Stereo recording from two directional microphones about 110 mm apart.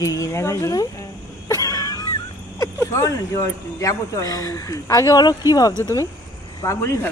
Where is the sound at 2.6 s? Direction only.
30° left (ahead or behind).